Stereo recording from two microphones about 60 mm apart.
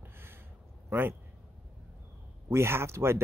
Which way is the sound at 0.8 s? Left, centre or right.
Right.